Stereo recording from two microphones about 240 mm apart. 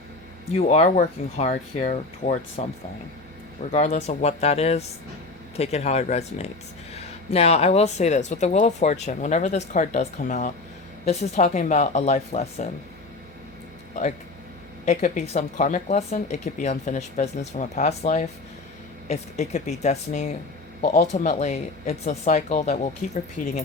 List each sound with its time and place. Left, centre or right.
0.5 s speech: left
14.8 s speech: left